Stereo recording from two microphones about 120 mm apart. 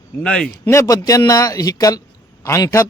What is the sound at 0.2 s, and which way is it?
Speech, 5° left (ahead or behind).